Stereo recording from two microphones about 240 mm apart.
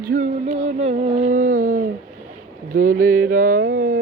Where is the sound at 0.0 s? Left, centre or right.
Right.